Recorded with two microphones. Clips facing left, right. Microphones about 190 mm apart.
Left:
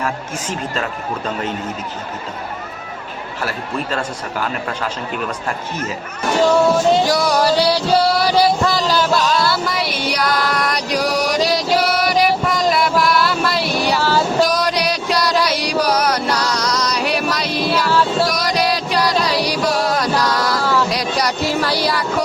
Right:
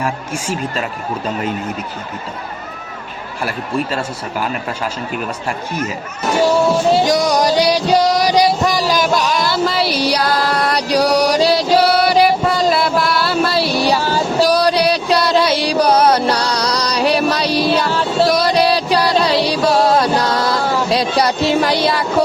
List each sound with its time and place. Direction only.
0.0 s speech: 10° right (ahead or behind)
3.9 s speech: 10° right (ahead or behind)
7.0 s music: 20° right (ahead or behind)
9.6 s music: 30° right (ahead or behind)
14.0 s a sound: 15° right (ahead or behind)
14.3 s music: 35° right (ahead or behind)
20.9 s a sound: 25° right (ahead or behind)